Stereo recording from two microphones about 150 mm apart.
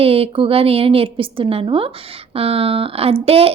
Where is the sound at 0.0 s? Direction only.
40° right (ahead or behind).